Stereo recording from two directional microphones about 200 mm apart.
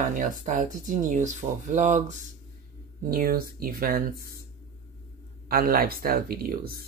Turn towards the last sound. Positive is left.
turn(degrees=-50)  # may be behind; listen again after turning